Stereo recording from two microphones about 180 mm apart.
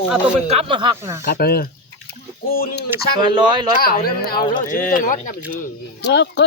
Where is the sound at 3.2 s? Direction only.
25° right (ahead or behind).